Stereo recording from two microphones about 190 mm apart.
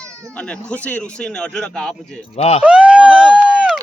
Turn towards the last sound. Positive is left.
turn(degrees=-5)  # may be behind; listen again after turning